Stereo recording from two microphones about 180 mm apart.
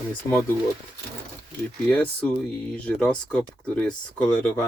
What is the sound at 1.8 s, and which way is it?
Speech, 5° left (ahead or behind).